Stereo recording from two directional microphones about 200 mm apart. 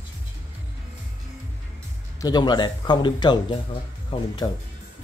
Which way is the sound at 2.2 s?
20° left (ahead or behind).